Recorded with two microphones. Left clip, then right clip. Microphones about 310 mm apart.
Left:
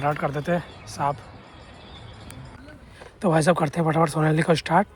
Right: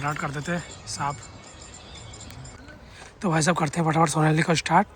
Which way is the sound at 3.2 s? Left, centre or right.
Centre.